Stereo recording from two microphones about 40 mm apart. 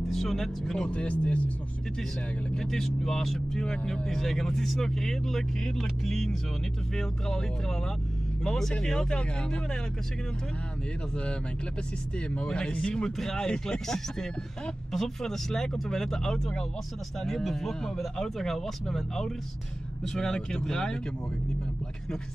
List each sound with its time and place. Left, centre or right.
0.1 s speech: centre
0.8 s speech: left
2.5 s speech: centre
3.5 s speech: centre
12.4 s speech: left